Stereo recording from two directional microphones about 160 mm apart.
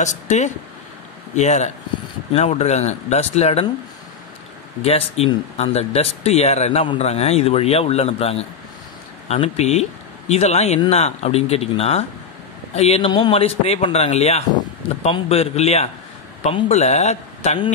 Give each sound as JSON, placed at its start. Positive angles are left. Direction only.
{"t": 0.0, "sound": "speech", "side_deg": 45}
{"t": 4.8, "sound": "speech", "side_deg": 40}